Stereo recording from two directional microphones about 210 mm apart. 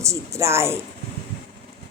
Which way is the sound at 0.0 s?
15° right (ahead or behind).